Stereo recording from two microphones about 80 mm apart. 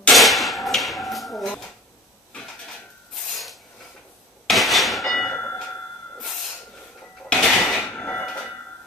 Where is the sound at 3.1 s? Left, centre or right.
Centre.